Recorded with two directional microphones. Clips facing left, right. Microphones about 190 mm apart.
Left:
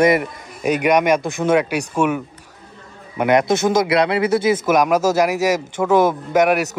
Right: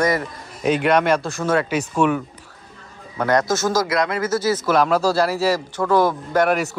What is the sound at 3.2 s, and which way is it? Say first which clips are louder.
Speech: left 3 dB; 20° left (ahead or behind).